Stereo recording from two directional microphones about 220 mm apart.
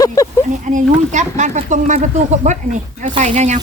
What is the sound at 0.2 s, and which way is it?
Speech, 15° left (ahead or behind).